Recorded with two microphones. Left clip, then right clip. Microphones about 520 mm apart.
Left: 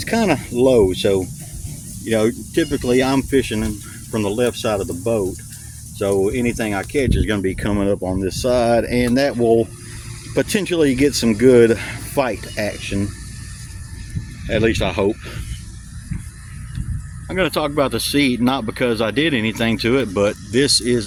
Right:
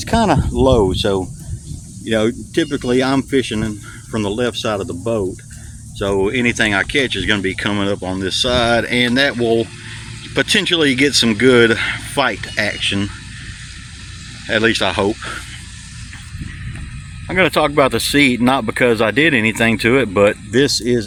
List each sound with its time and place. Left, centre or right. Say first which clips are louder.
0.0 s speech: right 3 dB; left
14.4 s speech: right 3 dB; left
17.2 s speech: right 5 dB; left